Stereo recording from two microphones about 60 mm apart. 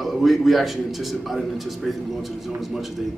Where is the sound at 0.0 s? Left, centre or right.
Centre.